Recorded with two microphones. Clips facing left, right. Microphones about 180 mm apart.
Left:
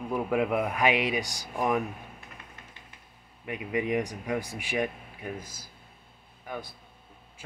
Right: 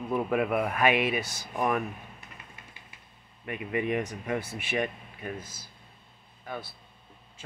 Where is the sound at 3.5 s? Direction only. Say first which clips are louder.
Even; 10° left (ahead or behind).